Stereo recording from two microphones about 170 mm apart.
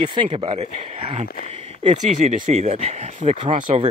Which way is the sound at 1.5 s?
35° right (ahead or behind).